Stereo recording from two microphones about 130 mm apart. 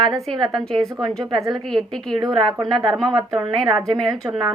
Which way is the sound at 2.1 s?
35° right (ahead or behind).